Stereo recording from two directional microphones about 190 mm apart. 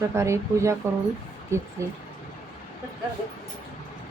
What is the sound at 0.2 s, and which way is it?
Speech, 15° right (ahead or behind).